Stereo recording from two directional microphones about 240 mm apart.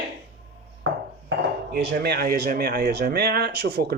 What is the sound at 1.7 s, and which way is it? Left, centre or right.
Speech, right.